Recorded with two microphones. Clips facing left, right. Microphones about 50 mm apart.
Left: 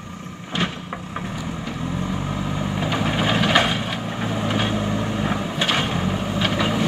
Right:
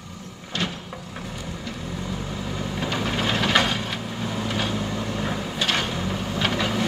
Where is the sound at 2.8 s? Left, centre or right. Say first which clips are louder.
Left 3 dB; centre.